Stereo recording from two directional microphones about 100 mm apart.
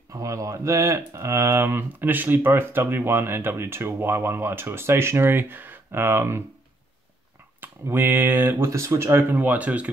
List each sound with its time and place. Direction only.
0.1 s speech: 35° right (ahead or behind)
7.6 s speech: 20° right (ahead or behind)
8.6 s speech: 30° right (ahead or behind); by 9.8 s 15° right (ahead or behind)